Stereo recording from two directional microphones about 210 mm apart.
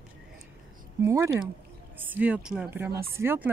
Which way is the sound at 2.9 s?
45° right (ahead or behind).